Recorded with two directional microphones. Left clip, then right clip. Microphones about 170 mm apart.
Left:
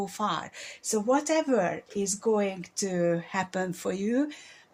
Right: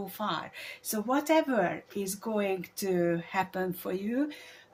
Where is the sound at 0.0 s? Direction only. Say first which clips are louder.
Left 4 dB; 40° left (ahead or behind).